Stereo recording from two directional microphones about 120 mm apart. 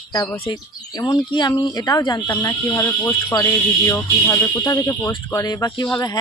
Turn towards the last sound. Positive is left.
turn(degrees=35)  # may be behind; listen again after turning